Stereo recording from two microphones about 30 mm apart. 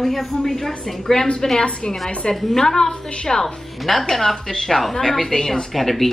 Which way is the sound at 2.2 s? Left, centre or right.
Left.